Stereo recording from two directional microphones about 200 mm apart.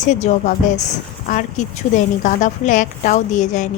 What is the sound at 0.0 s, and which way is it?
A woman's voice, 35° left (ahead or behind).